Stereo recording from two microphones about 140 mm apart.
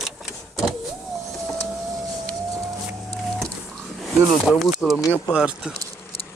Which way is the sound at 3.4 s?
Centre (ahead or behind).